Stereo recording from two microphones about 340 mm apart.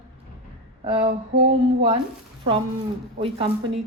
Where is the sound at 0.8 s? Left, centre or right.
Centre.